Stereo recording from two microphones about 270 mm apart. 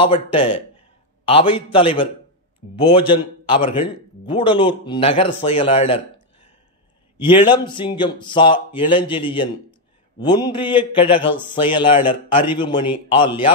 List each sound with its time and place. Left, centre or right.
0.0 s a man's voice: centre
7.4 s a man's voice: centre